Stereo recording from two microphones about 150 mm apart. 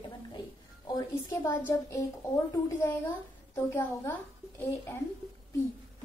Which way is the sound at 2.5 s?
20° left (ahead or behind).